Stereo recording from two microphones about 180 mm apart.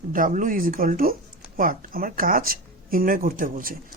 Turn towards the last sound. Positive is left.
turn(degrees=-50)  # may be behind; listen again after turning